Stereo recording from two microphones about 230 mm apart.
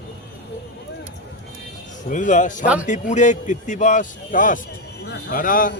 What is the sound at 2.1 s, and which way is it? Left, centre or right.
A man's voice, left.